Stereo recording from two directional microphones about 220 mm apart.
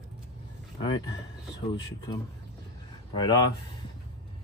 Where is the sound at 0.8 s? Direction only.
20° left (ahead or behind).